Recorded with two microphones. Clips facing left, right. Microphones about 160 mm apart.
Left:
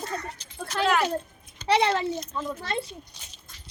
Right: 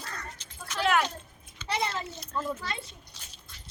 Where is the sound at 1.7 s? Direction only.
75° left (ahead or behind).